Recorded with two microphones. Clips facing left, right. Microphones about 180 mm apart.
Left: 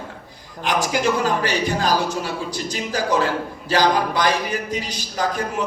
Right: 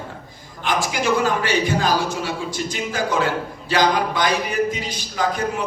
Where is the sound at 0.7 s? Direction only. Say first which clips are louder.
Left 1 dB; 40° left (ahead or behind).